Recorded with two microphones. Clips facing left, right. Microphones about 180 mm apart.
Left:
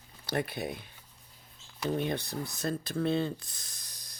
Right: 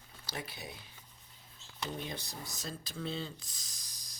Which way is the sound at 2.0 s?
60° left (ahead or behind).